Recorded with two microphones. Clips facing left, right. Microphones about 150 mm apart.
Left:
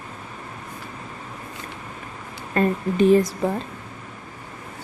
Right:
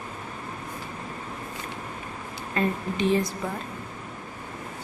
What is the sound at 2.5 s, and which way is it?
Speech, 45° left (ahead or behind).